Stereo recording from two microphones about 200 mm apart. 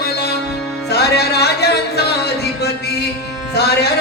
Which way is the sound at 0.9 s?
55° left (ahead or behind).